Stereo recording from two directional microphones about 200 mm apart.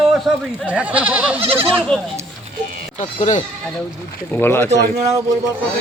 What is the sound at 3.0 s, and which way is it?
Speech, 35° left (ahead or behind).